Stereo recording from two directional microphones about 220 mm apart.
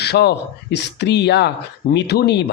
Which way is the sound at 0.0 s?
50° left (ahead or behind).